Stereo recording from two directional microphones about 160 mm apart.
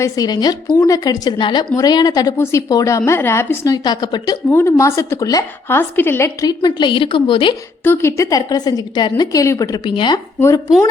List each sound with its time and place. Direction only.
0.0 s a woman's voice: 25° left (ahead or behind)
4.4 s a woman's voice: 15° left (ahead or behind); by 7.5 s 30° left (ahead or behind)
7.9 s a woman's voice: 15° left (ahead or behind)